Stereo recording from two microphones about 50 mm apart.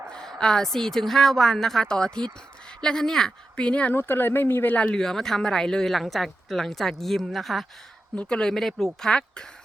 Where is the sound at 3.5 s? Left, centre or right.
Left.